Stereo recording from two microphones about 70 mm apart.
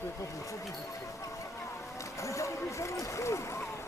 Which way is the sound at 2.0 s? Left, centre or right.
Left.